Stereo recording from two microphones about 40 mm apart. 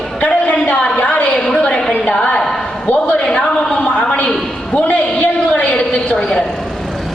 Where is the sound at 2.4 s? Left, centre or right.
Centre.